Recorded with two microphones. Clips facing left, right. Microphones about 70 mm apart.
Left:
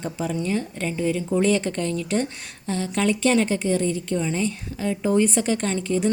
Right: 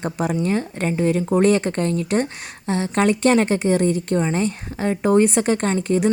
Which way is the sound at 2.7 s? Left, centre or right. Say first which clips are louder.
Right 4 dB; right.